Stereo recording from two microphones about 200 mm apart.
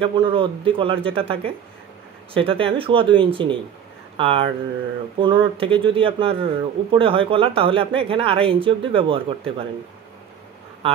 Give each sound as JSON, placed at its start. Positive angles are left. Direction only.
{"t": 0.0, "sound": "speech", "side_deg": -25}